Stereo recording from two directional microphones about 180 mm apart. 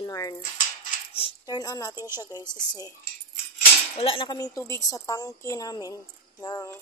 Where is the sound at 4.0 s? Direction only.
30° left (ahead or behind).